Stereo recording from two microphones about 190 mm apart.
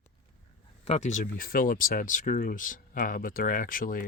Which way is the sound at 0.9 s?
35° left (ahead or behind).